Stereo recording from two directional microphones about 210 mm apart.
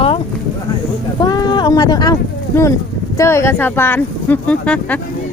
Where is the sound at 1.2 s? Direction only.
20° left (ahead or behind).